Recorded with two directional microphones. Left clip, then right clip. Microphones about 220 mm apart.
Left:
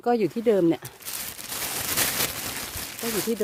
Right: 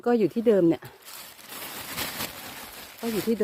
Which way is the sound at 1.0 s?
50° left (ahead or behind).